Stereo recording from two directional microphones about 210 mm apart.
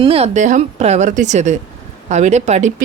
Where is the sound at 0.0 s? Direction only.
30° right (ahead or behind).